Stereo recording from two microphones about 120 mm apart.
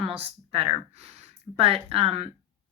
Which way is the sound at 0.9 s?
60° right (ahead or behind).